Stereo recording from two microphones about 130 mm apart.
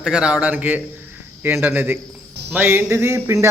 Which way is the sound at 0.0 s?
5° right (ahead or behind).